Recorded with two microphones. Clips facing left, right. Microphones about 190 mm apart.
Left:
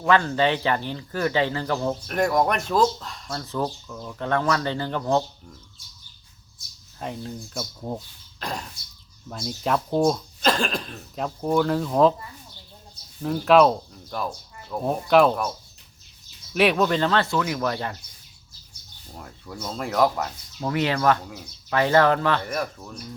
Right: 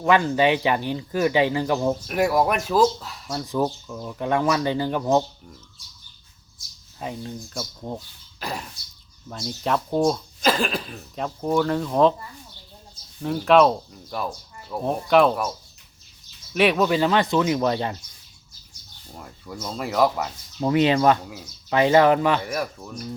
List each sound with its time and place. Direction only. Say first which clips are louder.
0.1 s speech: right 2 dB; 15° right (ahead or behind)
7.0 s speech: right 1 dB; centre (ahead or behind)
8.4 s a sound: even; 5° right (ahead or behind)
9.3 s speech: even; centre (ahead or behind)
13.2 s speech: even; centre (ahead or behind)
16.6 s speech: right 1 dB; centre (ahead or behind); by 17.9 s 20° right (ahead or behind)
19.1 s speech: right 1 dB; 5° right (ahead or behind)
20.6 s speech: right 5 dB; 20° right (ahead or behind)